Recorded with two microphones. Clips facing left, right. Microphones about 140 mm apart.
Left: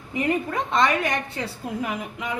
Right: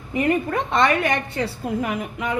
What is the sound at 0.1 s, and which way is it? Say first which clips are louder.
A woman's voice: right 4 dB; 60° right (ahead or behind).